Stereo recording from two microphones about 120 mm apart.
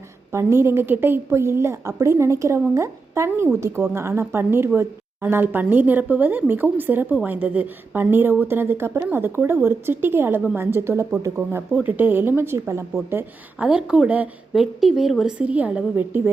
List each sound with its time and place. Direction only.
0.3 s a woman's voice: 20° right (ahead or behind)